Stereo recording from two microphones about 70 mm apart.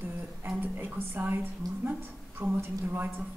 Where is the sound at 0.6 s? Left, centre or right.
Right.